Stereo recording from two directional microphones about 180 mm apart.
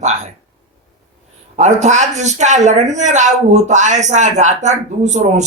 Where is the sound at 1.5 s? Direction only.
40° right (ahead or behind).